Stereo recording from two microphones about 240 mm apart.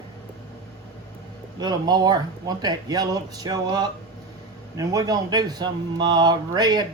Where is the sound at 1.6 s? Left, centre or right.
Centre.